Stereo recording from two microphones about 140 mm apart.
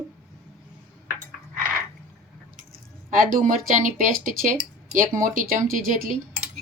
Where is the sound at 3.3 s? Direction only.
65° right (ahead or behind).